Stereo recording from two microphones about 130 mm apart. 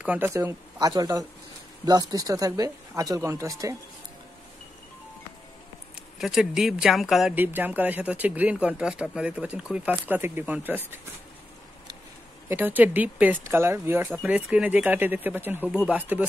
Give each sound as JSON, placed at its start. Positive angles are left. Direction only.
{"t": 0.0, "sound": "speech", "side_deg": -10}
{"t": 0.3, "sound": "speech", "side_deg": -25}
{"t": 6.1, "sound": "speech", "side_deg": 0}
{"t": 7.3, "sound": "speech", "side_deg": -15}
{"t": 12.4, "sound": "speech", "side_deg": -15}